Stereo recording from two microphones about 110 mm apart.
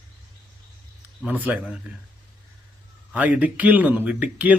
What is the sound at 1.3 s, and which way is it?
Speech, 15° right (ahead or behind).